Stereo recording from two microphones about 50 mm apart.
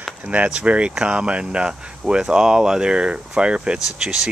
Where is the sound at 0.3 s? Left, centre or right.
Right.